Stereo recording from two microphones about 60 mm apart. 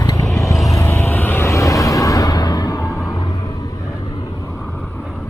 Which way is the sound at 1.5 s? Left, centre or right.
Left.